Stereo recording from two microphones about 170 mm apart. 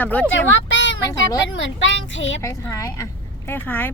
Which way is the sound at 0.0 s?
10° left (ahead or behind).